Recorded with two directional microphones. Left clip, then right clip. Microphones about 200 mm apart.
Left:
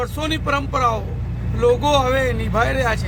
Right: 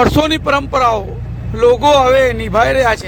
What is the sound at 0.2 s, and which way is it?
Speech, 35° right (ahead or behind).